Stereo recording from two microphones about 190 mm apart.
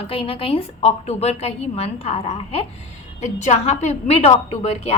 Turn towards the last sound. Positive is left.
turn(degrees=35)  # may be behind; listen again after turning